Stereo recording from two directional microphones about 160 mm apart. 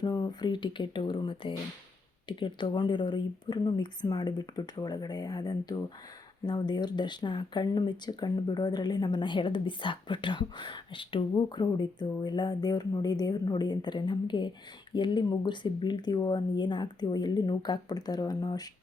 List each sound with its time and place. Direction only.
0.0 s speech: 25° left (ahead or behind)